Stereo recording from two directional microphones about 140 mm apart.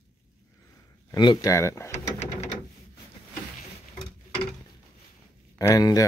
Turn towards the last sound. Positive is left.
turn(degrees=25)  # may be behind; listen again after turning